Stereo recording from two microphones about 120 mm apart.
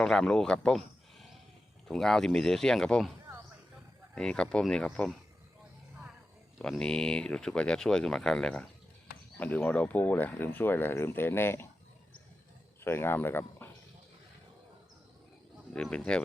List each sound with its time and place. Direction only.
0.0 s speech: 5° left (ahead or behind)
1.9 s speech: 5° left (ahead or behind)
4.1 s speech: 5° left (ahead or behind)
6.6 s speech: 5° left (ahead or behind)
12.8 s speech: 20° left (ahead or behind)
15.7 s speech: 5° left (ahead or behind)